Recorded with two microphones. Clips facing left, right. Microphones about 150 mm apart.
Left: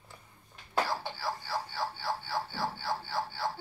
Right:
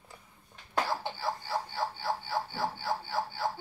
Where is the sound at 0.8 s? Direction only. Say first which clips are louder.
Right 2 dB; 15° right (ahead or behind).